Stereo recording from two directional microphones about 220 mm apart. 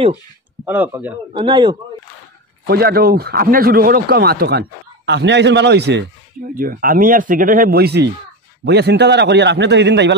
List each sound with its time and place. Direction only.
0.7 s speech: 10° right (ahead or behind)
1.3 s a man's voice: 20° right (ahead or behind)
2.6 s a man's voice: 45° right (ahead or behind)
6.5 s a man's voice: 40° right (ahead or behind)